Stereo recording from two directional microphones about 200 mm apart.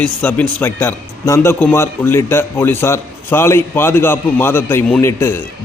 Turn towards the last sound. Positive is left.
turn(degrees=10)  # may be behind; listen again after turning